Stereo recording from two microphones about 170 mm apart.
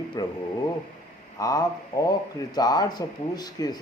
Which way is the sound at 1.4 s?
20° left (ahead or behind).